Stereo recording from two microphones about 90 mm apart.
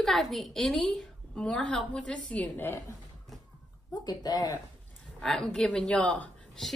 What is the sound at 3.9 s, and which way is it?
Speech, 45° left (ahead or behind).